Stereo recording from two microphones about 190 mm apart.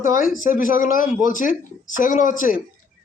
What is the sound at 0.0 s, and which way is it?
Speech, 45° left (ahead or behind).